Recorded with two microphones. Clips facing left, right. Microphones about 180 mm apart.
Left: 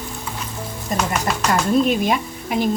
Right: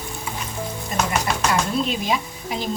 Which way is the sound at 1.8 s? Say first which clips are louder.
Left 5 dB; 55° left (ahead or behind).